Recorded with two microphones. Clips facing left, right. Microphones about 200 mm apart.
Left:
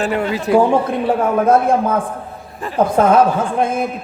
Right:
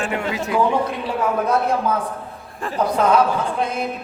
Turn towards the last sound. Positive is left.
turn(degrees=50)  # may be behind; listen again after turning